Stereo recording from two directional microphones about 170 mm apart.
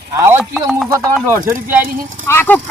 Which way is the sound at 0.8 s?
15° right (ahead or behind).